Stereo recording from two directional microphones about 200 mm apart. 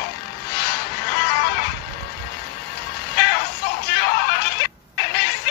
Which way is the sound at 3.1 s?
50° left (ahead or behind).